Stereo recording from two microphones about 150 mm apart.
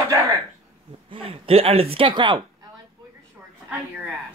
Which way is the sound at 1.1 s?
40° right (ahead or behind).